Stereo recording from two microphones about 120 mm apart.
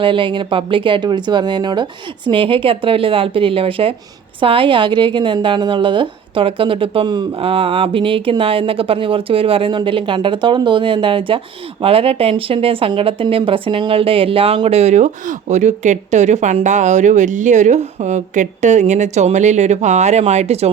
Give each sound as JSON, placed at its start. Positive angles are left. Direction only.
{"t": 0.0, "sound": "speech", "side_deg": -45}
{"t": 7.4, "sound": "speech", "side_deg": -50}